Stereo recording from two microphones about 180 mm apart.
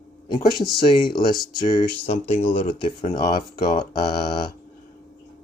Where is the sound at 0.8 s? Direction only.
25° left (ahead or behind).